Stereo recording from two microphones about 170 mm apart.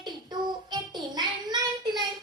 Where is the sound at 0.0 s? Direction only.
25° right (ahead or behind).